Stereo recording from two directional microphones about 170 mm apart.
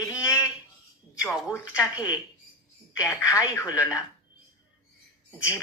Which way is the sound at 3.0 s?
20° left (ahead or behind).